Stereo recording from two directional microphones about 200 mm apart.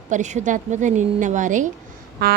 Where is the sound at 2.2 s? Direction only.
55° right (ahead or behind).